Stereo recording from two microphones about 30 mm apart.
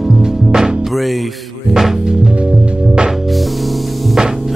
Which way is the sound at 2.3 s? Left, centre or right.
Right.